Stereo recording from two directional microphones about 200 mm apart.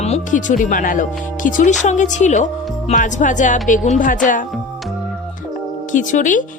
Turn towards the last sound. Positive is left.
turn(degrees=40)  # may be behind; listen again after turning